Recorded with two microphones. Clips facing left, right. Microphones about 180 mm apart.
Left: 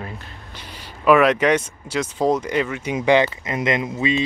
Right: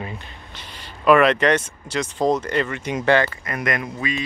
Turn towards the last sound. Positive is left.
turn(degrees=25)  # may be behind; listen again after turning